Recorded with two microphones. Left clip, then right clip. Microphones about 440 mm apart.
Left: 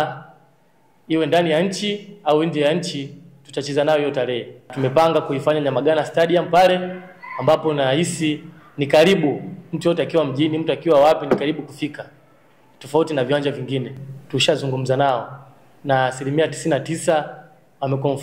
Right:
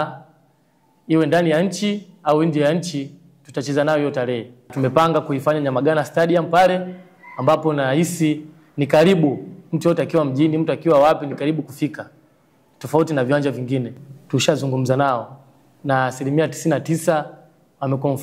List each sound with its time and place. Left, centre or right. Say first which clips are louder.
1.0 s a man's voice: right 1 dB; right